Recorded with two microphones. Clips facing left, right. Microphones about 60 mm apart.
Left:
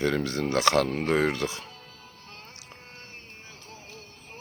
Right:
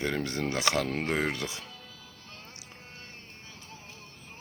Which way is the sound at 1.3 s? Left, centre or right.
Left.